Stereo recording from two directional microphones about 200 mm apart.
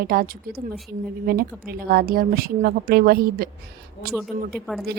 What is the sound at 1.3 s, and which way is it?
A woman's voice, 50° right (ahead or behind).